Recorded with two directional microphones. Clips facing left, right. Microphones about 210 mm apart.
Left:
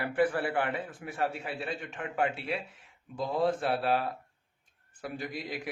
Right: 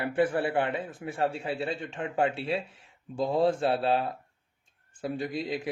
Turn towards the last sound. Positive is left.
turn(degrees=-25)  # may be behind; listen again after turning